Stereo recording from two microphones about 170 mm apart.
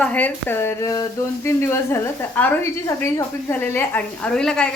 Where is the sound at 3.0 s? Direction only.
10° left (ahead or behind).